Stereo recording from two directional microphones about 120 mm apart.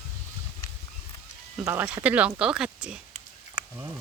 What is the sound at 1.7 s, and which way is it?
Speech, 10° right (ahead or behind).